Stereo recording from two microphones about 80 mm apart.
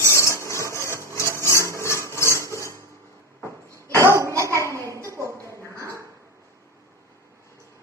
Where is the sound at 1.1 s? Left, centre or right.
Left.